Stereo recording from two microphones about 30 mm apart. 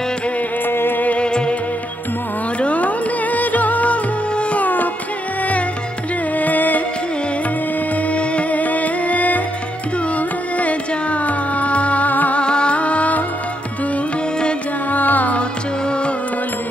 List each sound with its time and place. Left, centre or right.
2.6 s music: left
4.6 s music: left
6.3 s music: left
8.1 s music: left
12.1 s music: left
12.4 s music: left
12.7 s music: left
14.9 s music: left